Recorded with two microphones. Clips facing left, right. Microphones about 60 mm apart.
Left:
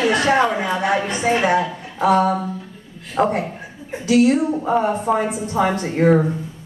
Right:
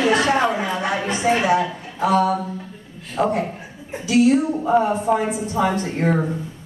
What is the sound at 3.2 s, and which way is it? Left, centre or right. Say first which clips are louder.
A woman's voice: left 2 dB; left.